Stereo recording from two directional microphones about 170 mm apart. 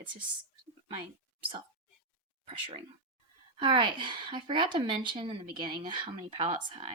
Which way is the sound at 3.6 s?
30° right (ahead or behind).